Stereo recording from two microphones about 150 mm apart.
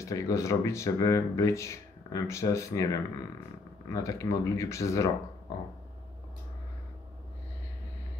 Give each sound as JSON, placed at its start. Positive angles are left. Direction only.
{"t": 0.0, "sound": "speech", "side_deg": 20}